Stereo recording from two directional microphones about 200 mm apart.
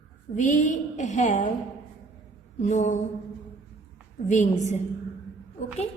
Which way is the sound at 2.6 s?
35° left (ahead or behind).